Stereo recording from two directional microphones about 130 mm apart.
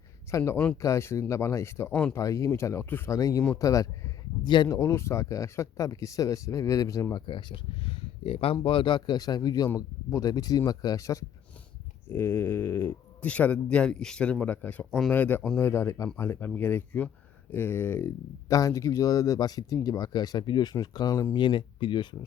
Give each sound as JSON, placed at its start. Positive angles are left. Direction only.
{"t": 0.3, "sound": "speech", "side_deg": 20}
{"t": 2.1, "sound": "speech", "side_deg": 25}
{"t": 4.4, "sound": "speech", "side_deg": 35}
{"t": 7.3, "sound": "speech", "side_deg": 40}
{"t": 14.8, "sound": "speech", "side_deg": 0}
{"t": 15.1, "sound": "speech", "side_deg": 15}